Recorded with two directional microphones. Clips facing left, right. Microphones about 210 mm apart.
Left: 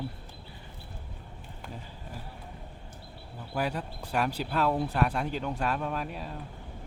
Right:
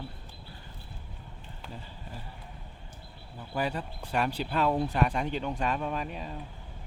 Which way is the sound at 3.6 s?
10° left (ahead or behind).